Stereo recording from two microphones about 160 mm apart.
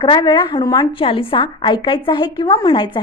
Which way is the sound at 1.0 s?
35° left (ahead or behind).